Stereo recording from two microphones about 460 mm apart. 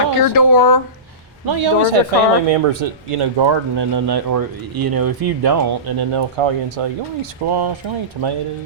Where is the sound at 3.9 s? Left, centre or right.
Right.